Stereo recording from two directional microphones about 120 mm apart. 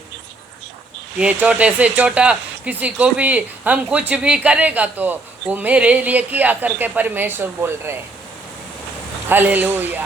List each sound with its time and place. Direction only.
1.2 s speech: 15° right (ahead or behind)
9.3 s speech: 15° right (ahead or behind)